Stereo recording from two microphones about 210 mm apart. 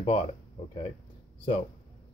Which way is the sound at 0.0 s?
30° left (ahead or behind).